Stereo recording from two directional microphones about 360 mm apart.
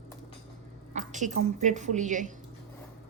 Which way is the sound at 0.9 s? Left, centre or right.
Centre.